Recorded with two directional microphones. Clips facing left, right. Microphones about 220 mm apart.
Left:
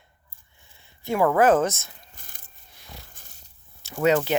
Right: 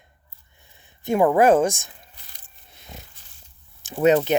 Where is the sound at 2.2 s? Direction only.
50° left (ahead or behind).